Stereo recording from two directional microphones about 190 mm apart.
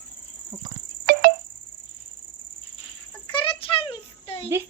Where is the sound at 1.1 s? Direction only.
55° right (ahead or behind).